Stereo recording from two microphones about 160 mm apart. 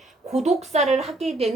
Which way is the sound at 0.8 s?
Centre (ahead or behind).